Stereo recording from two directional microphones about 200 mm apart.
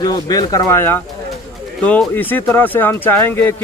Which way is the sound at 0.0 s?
20° left (ahead or behind).